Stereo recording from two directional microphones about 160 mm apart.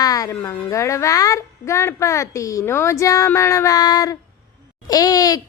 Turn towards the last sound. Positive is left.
turn(degrees=25)  # may be behind; listen again after turning